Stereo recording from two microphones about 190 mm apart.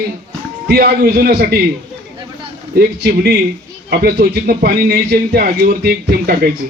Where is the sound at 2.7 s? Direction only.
55° right (ahead or behind).